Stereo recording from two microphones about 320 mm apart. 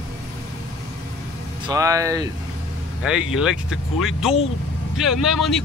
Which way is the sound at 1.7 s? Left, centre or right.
Centre.